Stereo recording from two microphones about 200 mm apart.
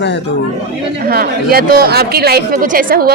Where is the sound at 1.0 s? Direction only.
50° right (ahead or behind).